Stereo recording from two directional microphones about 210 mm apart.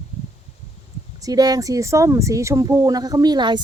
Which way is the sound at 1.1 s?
15° right (ahead or behind).